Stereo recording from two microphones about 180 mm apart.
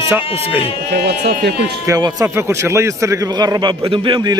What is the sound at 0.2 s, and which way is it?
Speech, 30° left (ahead or behind).